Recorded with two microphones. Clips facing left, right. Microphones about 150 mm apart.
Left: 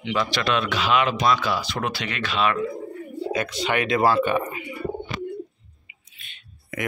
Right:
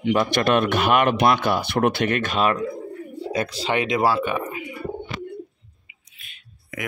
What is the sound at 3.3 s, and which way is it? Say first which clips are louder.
Speech: right 1 dB; 35° right (ahead or behind).